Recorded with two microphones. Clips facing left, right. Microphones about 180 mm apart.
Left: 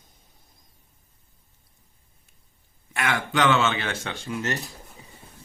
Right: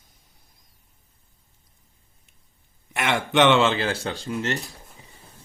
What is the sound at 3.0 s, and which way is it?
Speech, 25° right (ahead or behind).